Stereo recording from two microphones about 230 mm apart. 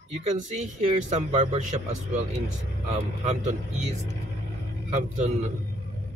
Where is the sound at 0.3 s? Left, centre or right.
Right.